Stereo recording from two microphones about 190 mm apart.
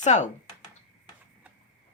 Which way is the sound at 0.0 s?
40° left (ahead or behind).